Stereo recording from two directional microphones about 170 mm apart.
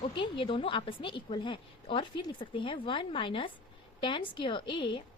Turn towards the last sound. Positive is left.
turn(degrees=30)  # may be behind; listen again after turning